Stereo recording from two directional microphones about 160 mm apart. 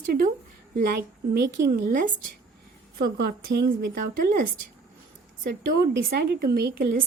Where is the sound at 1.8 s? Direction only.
65° right (ahead or behind).